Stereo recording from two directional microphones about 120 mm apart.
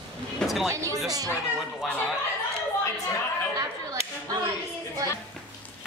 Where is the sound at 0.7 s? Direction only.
25° right (ahead or behind).